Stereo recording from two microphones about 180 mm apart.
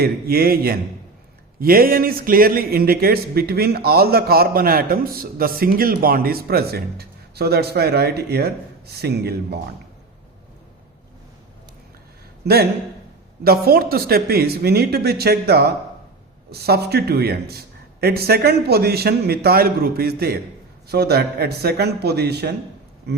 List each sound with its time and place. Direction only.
0.0 s a man's voice: 55° right (ahead or behind)
13.4 s a man's voice: 60° right (ahead or behind)